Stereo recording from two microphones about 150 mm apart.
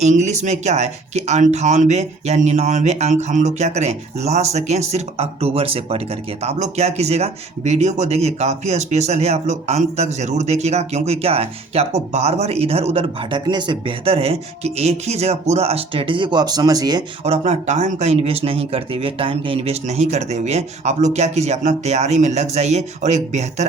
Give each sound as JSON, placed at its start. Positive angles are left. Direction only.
{"t": 0.0, "sound": "speech", "side_deg": -50}
{"t": 13.4, "sound": "speech", "side_deg": -30}
{"t": 17.2, "sound": "speech", "side_deg": -45}